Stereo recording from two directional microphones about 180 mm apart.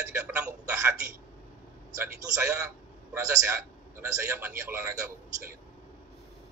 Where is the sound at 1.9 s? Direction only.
15° right (ahead or behind).